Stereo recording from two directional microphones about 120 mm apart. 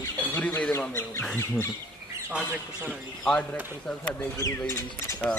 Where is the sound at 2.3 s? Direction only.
15° right (ahead or behind).